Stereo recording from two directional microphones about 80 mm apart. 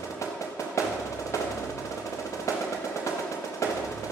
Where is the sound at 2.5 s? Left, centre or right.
Left.